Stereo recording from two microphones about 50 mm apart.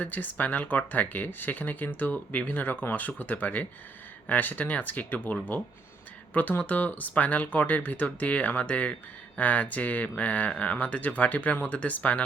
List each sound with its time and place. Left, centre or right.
0.0 s speech: left